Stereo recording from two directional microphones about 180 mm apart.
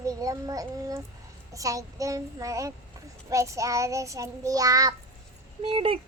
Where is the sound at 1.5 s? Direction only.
20° right (ahead or behind).